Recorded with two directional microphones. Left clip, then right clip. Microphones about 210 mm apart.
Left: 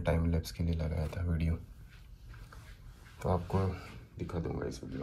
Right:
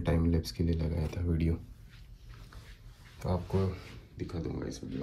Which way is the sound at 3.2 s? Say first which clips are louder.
Even; centre (ahead or behind).